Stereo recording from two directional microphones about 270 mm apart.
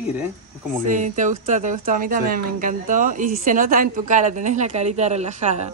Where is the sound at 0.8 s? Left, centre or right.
Right.